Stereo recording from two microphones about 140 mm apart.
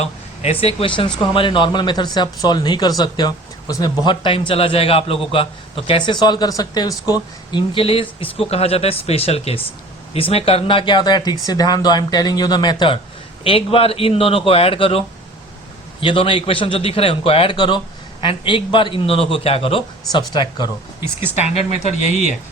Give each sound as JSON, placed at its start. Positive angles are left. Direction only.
{"t": 0.0, "sound": "speech", "side_deg": 45}
{"t": 20.1, "sound": "speech", "side_deg": 35}
{"t": 21.3, "sound": "speech", "side_deg": 50}